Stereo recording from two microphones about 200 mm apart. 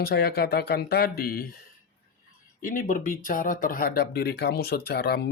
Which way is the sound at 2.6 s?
40° left (ahead or behind).